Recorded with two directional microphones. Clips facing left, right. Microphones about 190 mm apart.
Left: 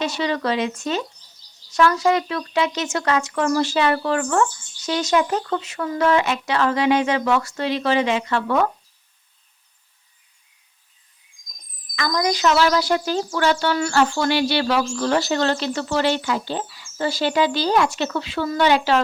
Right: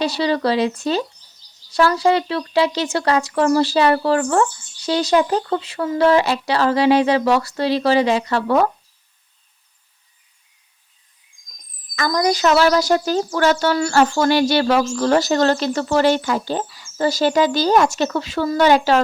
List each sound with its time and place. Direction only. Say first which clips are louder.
0.0 s speech: right 4 dB; 35° right (ahead or behind)
11.9 s speech: right 3 dB; 40° right (ahead or behind)